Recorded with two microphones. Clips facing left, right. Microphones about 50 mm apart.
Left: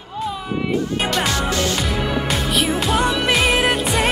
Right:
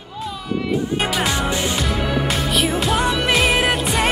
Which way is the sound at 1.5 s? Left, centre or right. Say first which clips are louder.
Left 1 dB; centre.